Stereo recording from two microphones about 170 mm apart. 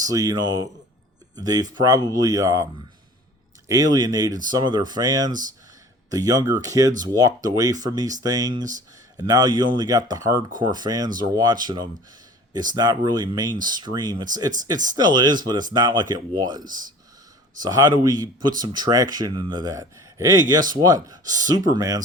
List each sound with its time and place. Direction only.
0.0 s speech: 20° right (ahead or behind)
3.7 s speech: 20° right (ahead or behind)
16.6 s speech: 50° right (ahead or behind)
17.6 s speech: 20° right (ahead or behind)